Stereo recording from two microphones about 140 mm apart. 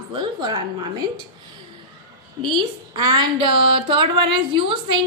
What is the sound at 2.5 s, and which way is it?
A woman's voice, 30° right (ahead or behind).